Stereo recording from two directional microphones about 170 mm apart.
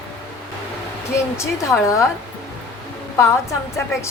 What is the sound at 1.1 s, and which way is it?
A woman's voice, 15° left (ahead or behind).